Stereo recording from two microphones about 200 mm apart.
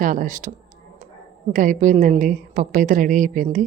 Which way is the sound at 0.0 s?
40° right (ahead or behind).